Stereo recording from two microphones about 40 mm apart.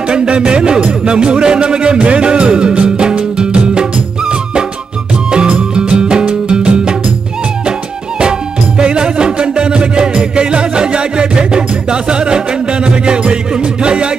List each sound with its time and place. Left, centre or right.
0.1 s music: right
5.3 s music: right
8.2 s music: right